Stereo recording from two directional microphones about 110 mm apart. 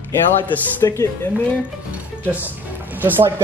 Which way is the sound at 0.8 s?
30° left (ahead or behind).